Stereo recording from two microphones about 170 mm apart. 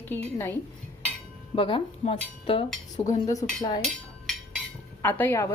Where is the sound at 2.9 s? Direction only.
45° left (ahead or behind).